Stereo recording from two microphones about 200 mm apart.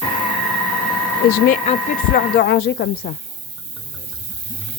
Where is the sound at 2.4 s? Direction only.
55° left (ahead or behind).